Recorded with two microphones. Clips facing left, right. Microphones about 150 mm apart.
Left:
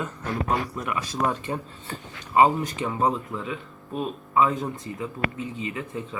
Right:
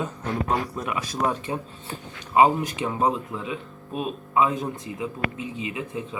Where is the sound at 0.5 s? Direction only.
20° right (ahead or behind).